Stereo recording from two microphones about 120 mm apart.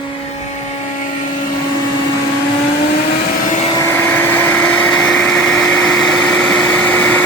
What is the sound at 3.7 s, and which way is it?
Vacuum cleaner, 20° left (ahead or behind).